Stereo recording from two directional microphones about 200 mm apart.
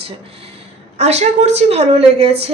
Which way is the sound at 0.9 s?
35° right (ahead or behind).